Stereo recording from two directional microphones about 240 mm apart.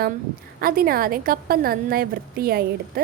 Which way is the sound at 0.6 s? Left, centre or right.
Right.